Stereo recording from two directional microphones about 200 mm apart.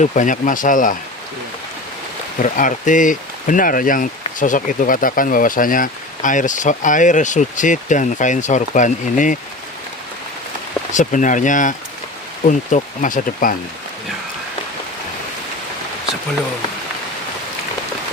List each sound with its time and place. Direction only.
0.0 s speech: 40° left (ahead or behind)
2.4 s speech: 40° left (ahead or behind)
10.9 s speech: 40° left (ahead or behind)